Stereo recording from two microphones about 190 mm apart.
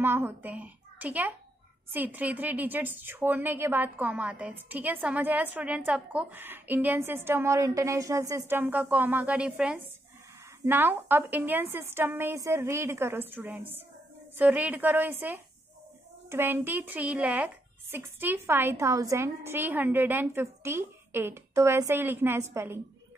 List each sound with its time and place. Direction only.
0.0 s a child's voice: 10° right (ahead or behind)